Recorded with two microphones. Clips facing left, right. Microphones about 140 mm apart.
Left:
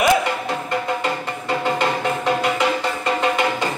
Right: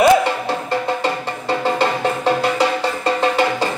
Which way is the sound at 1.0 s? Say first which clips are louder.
Right 3 dB; 30° right (ahead or behind).